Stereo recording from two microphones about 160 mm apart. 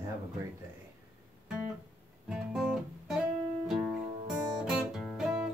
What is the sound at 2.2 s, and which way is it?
Guitar, 5° right (ahead or behind).